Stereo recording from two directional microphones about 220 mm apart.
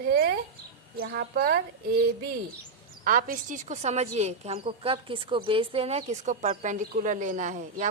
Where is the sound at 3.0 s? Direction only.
40° right (ahead or behind).